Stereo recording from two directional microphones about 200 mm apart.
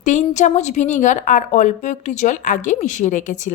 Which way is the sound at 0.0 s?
35° left (ahead or behind).